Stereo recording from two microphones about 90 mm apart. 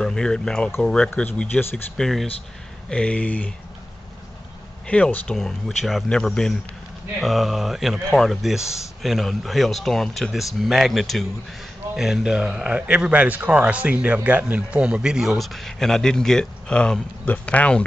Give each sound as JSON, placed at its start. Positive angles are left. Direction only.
{"t": 0.0, "sound": "speech", "side_deg": 5}
{"t": 1.4, "sound": "speech", "side_deg": 20}
{"t": 2.0, "sound": "speech", "side_deg": 5}
{"t": 2.9, "sound": "speech", "side_deg": 15}
{"t": 4.8, "sound": "speech", "side_deg": 15}
{"t": 5.4, "sound": "a man's voice", "side_deg": 0}